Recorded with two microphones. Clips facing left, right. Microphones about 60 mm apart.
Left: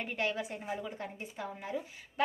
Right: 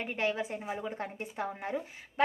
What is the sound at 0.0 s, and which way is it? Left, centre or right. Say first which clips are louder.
Speech: right 2 dB; right.